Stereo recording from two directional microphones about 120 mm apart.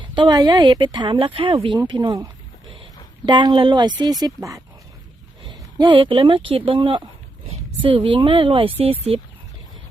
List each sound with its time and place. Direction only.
0.0 s speech: 40° right (ahead or behind)
2.6 s a sound: 45° right (ahead or behind)
4.0 s speech: 30° right (ahead or behind)
5.5 s speech: 40° right (ahead or behind)